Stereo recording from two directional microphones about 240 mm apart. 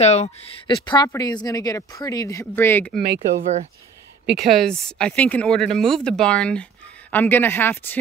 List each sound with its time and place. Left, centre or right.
0.0 s speech: left; by 3.0 s centre
3.3 s speech: right
4.3 s speech: centre